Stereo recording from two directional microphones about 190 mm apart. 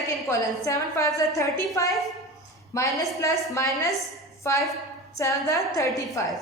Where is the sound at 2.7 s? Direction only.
15° left (ahead or behind).